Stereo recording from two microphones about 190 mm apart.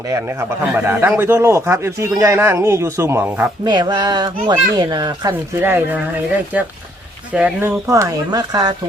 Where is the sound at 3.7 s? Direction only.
20° right (ahead or behind).